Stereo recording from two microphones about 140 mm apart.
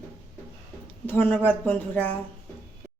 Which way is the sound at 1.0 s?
10° left (ahead or behind).